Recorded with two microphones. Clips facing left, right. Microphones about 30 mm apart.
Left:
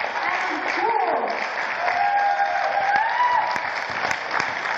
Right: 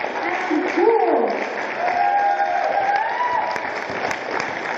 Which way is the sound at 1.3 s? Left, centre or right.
Left.